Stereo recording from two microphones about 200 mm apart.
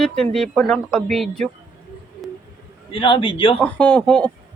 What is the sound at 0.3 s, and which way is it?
Speech, centre (ahead or behind).